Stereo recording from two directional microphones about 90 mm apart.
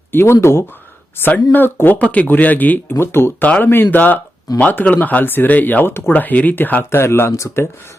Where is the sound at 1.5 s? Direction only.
20° left (ahead or behind).